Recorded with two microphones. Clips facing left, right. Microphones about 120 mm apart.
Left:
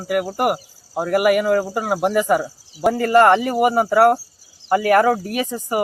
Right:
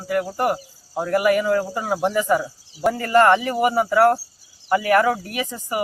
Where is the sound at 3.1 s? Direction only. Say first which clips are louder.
Left 2 dB; 15° left (ahead or behind).